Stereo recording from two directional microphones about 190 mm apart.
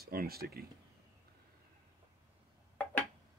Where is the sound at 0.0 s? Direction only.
55° right (ahead or behind).